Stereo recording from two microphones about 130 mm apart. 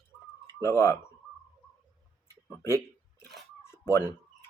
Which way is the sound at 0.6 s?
20° left (ahead or behind).